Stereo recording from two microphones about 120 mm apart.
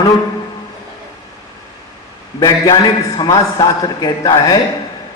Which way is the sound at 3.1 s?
35° left (ahead or behind).